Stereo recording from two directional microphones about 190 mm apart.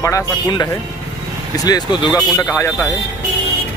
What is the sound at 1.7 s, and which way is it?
Speech, 20° left (ahead or behind).